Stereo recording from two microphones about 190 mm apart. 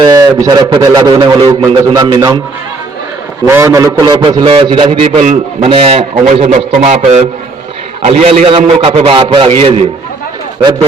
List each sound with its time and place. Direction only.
0.0 s a man's voice: 20° right (ahead or behind)
3.4 s a man's voice: 15° right (ahead or behind); by 9.8 s 30° right (ahead or behind)